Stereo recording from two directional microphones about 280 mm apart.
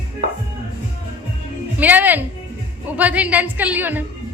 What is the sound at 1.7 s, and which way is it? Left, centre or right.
Speech, centre.